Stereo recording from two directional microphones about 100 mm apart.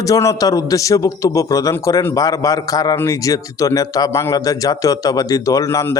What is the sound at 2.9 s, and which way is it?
A man's voice, 30° left (ahead or behind).